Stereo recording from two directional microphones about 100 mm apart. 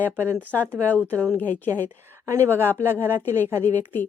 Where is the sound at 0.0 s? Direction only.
20° right (ahead or behind).